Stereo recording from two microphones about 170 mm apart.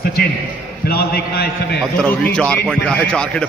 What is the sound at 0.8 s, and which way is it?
Speech, 65° left (ahead or behind).